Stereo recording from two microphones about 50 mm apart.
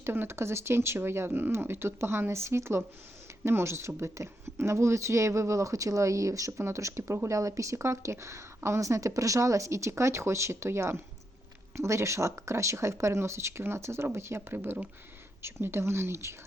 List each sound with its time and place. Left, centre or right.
0.0 s speech: right
11.8 s speech: right